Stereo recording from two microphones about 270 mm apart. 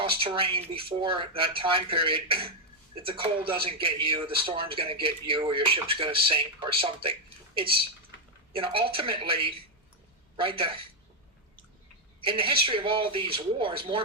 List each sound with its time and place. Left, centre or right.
0.0 s a man's voice: centre
12.2 s a man's voice: centre